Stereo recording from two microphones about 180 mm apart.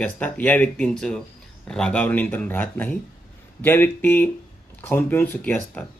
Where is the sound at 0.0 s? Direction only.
10° left (ahead or behind).